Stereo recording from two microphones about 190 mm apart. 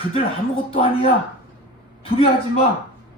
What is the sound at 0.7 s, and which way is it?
Speech, 30° left (ahead or behind).